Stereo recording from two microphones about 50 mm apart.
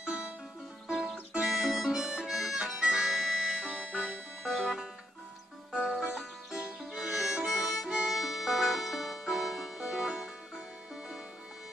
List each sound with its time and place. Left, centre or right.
0.0 s music: centre
1.4 s harmonica: centre
5.7 s music: centre
6.9 s music: centre
7.3 s harmonica: centre
7.9 s music: centre